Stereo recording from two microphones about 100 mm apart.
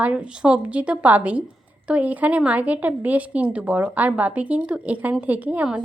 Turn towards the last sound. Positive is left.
turn(degrees=-15)  # may be behind; listen again after turning